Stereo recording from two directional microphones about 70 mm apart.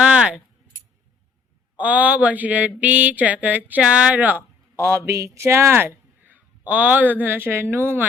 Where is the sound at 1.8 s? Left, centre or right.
Right.